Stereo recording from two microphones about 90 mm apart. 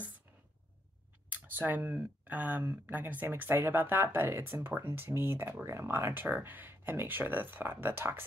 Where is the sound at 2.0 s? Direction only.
20° right (ahead or behind).